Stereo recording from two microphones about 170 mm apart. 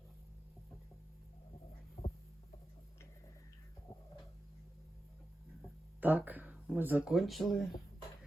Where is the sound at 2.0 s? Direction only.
40° left (ahead or behind).